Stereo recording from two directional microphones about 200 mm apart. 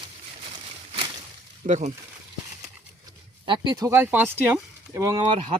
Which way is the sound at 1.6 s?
35° right (ahead or behind).